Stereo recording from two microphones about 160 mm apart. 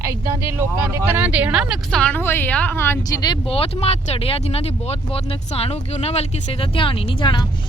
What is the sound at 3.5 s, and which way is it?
A woman's voice, 35° left (ahead or behind).